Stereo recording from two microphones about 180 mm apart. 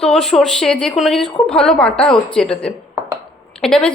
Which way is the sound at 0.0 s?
Centre (ahead or behind).